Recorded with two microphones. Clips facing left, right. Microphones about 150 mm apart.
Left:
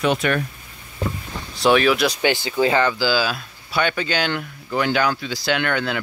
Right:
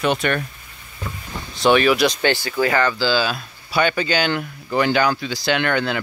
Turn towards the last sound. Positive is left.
turn(degrees=0)  # may be behind; listen again after turning